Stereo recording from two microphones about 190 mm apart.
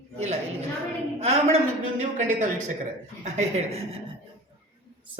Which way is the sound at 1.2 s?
35° right (ahead or behind).